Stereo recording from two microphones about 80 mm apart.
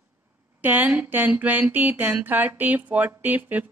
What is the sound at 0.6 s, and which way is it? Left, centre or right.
A woman's voice, right.